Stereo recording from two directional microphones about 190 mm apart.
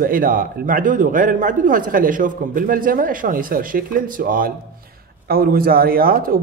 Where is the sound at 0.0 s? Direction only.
50° right (ahead or behind).